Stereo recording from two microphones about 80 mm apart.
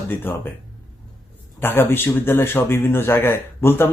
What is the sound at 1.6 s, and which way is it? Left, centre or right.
Speech, left.